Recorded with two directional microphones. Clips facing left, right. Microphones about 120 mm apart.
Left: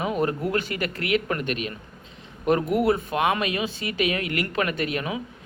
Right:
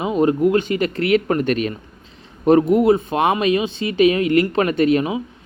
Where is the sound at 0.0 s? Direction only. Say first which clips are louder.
Right 8 dB; 20° right (ahead or behind).